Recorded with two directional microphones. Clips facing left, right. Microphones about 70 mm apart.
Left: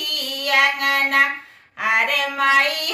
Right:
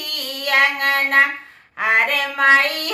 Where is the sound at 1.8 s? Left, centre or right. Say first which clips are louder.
Right 2 dB; right.